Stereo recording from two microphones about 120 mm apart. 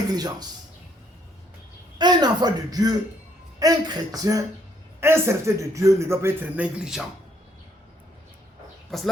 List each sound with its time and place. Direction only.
0.1 s speech: 35° right (ahead or behind)
2.0 s a man's voice: 35° right (ahead or behind); by 7.0 s 5° right (ahead or behind)
8.9 s speech: centre (ahead or behind)